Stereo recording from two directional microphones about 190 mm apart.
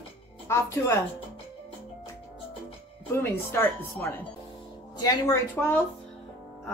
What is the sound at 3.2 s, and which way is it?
A woman's voice, 15° left (ahead or behind).